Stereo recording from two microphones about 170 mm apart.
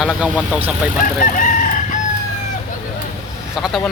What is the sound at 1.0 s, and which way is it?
Chicken, 50° left (ahead or behind).